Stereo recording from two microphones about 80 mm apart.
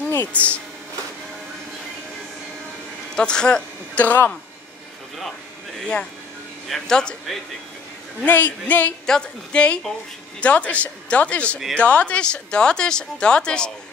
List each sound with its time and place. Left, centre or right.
0.1 s speech: left
3.2 s speech: centre
5.8 s speech: centre
8.6 s speech: left
9.0 s speech: centre